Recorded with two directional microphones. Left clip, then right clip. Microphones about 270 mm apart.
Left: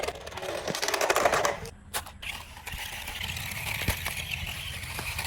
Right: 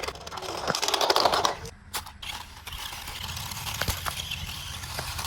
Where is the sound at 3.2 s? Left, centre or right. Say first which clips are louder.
Left 1 dB; centre.